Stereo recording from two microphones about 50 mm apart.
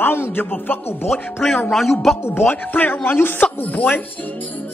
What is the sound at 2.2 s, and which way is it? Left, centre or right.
A man's voice, left.